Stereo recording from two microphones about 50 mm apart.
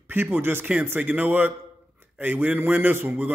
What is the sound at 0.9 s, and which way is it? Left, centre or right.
A man's voice, right.